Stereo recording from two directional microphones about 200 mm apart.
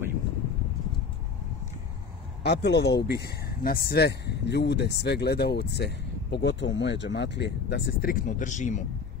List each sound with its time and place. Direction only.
2.4 s speech: 55° left (ahead or behind); by 8.8 s 40° left (ahead or behind)